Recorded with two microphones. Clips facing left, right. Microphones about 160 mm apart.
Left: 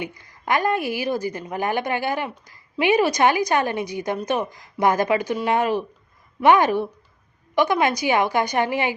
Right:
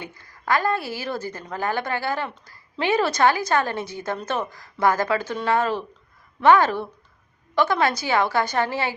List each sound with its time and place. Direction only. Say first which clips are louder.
0.0 s a woman's voice: left 4 dB; 15° left (ahead or behind)